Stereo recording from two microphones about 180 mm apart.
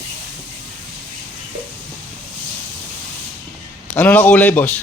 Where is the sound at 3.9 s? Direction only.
10° left (ahead or behind).